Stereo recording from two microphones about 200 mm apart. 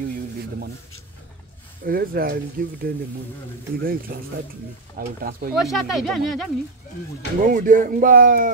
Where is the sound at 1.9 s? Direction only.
50° right (ahead or behind).